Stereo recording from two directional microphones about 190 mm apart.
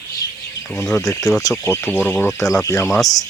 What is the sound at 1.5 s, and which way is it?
Speech, 15° left (ahead or behind).